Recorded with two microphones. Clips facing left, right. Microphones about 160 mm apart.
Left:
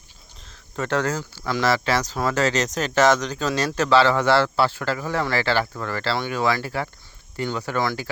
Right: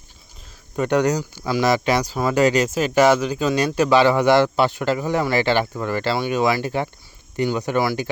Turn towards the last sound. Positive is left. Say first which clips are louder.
# right 5 dB
turn(degrees=-20)  # may be behind; listen again after turning